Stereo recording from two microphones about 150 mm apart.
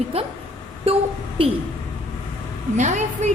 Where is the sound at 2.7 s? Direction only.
50° right (ahead or behind).